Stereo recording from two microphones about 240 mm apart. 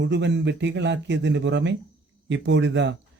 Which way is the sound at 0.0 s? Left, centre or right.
Right.